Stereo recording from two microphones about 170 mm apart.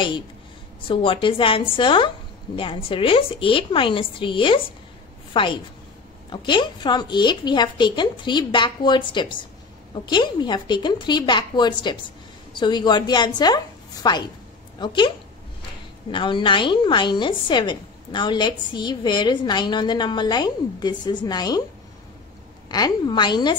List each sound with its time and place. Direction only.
0.8 s a woman's voice: 30° left (ahead or behind)
22.7 s a woman's voice: 25° left (ahead or behind)